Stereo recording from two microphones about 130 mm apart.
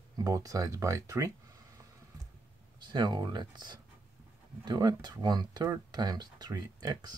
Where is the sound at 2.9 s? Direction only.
35° right (ahead or behind).